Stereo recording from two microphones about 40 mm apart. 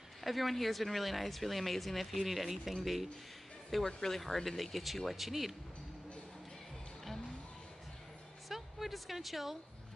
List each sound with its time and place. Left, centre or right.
0.2 s speech: centre
3.8 s speech: centre
8.5 s a woman's voice: centre